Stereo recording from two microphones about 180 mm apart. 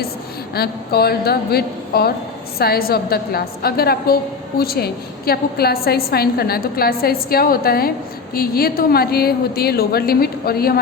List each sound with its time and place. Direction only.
0.5 s a woman's voice: 60° left (ahead or behind)